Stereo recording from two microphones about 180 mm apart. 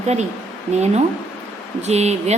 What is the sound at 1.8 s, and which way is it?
Speech, 40° right (ahead or behind).